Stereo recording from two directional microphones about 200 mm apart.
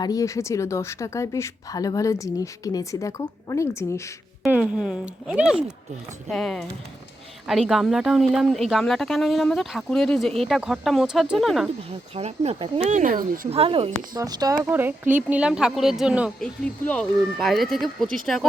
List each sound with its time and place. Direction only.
0.0 s speech: 15° left (ahead or behind)
4.4 s speech: 5° right (ahead or behind)
12.1 s speech: 30° right (ahead or behind)
13.5 s speech: 30° right (ahead or behind); by 18.4 s centre (ahead or behind)